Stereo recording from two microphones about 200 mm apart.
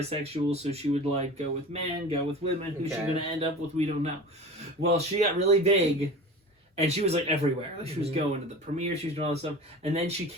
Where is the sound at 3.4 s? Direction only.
35° right (ahead or behind).